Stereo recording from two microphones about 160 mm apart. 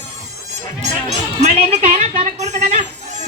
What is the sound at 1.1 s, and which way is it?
Music, 45° right (ahead or behind).